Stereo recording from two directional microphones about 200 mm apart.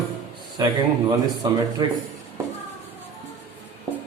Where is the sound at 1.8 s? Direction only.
20° right (ahead or behind).